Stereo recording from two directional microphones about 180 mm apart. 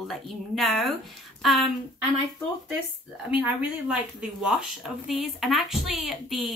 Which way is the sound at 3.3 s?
5° right (ahead or behind).